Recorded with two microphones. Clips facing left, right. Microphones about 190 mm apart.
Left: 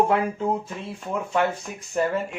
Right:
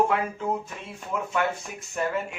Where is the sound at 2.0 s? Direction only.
30° left (ahead or behind).